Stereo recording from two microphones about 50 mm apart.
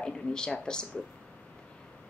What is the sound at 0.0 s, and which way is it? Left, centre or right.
Speech, centre.